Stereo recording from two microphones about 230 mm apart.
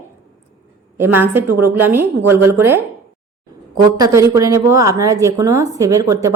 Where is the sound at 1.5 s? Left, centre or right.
Right.